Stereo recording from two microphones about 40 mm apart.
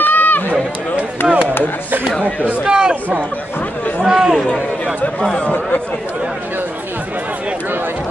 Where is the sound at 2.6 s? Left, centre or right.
Right.